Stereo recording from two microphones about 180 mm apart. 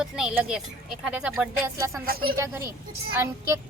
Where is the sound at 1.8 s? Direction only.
15° right (ahead or behind).